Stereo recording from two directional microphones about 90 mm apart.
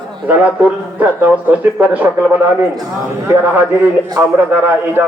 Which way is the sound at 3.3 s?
20° right (ahead or behind).